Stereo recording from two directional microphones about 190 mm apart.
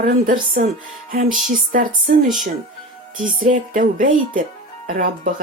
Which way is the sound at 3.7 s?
45° right (ahead or behind).